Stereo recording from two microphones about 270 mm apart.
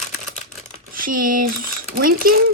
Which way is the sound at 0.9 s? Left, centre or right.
Right.